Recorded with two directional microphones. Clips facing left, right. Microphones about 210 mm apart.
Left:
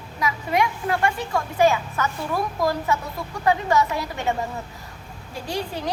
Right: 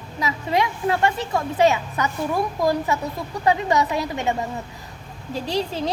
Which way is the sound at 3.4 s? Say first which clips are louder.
Even; 20° right (ahead or behind).